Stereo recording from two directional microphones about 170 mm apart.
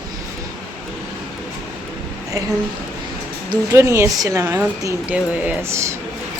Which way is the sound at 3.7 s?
15° right (ahead or behind).